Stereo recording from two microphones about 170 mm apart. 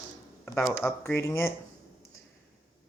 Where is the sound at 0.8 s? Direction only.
15° left (ahead or behind).